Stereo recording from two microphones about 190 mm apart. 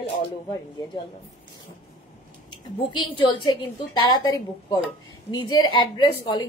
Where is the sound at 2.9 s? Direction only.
25° left (ahead or behind).